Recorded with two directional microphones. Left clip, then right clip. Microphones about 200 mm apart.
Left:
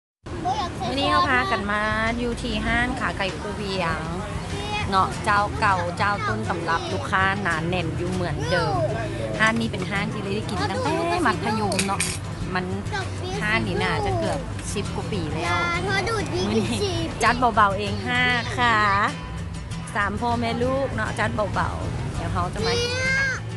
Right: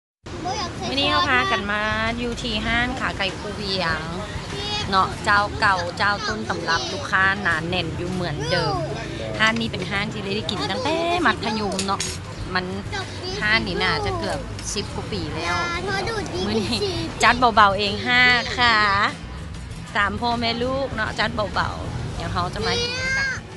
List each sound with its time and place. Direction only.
0.9 s speech: 5° left (ahead or behind)
7.1 s speech: 15° left (ahead or behind)
13.4 s speech: centre (ahead or behind)
15.6 s speech: 45° left (ahead or behind)
16.4 s speech: centre (ahead or behind)
22.8 s a sound: 55° left (ahead or behind)